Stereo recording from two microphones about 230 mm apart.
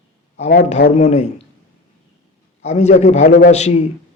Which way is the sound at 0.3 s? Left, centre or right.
Left.